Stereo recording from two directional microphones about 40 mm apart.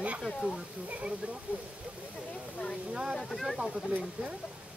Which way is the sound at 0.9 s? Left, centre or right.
Right.